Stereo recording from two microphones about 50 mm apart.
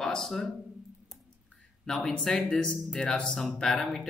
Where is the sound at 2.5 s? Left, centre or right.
Left; by 4.1 s centre.